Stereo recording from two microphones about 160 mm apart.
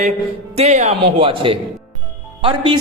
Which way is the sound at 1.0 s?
35° right (ahead or behind).